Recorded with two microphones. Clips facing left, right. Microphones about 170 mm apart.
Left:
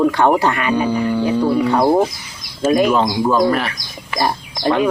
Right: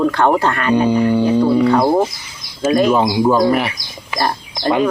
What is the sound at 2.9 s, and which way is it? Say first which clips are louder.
Speech: right 2 dB; 10° right (ahead or behind).